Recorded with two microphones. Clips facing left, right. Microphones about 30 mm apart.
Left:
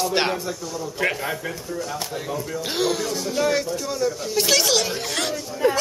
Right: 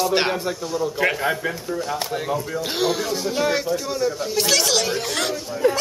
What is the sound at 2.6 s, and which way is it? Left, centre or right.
A man's voice, centre.